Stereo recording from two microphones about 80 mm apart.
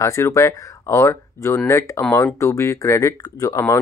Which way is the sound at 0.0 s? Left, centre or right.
Left.